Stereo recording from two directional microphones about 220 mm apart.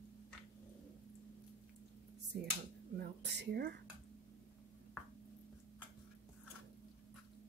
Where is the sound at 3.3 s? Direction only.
45° right (ahead or behind).